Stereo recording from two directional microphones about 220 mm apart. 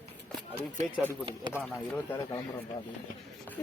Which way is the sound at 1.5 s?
5° left (ahead or behind).